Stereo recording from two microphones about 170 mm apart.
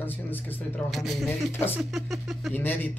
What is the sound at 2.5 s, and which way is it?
Speech, 10° left (ahead or behind).